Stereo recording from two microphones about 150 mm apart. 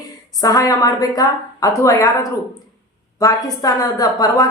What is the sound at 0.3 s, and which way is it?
A woman's voice, 25° left (ahead or behind).